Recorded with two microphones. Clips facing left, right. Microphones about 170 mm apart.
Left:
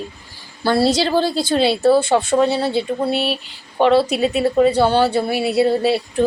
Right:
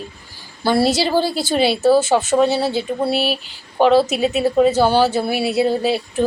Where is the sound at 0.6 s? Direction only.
15° right (ahead or behind).